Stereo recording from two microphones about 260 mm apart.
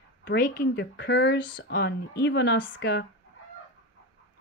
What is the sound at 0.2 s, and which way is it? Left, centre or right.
Speech, left.